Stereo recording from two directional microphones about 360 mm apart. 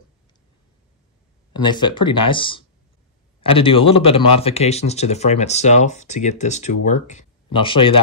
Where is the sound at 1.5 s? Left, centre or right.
Centre.